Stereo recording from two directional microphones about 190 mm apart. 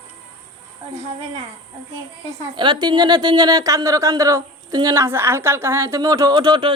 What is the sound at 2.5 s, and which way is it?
Speech, 25° right (ahead or behind).